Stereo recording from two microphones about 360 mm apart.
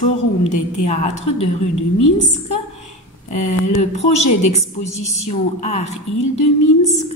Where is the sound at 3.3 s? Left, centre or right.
Centre.